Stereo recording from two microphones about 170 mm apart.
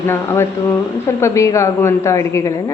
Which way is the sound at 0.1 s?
15° left (ahead or behind).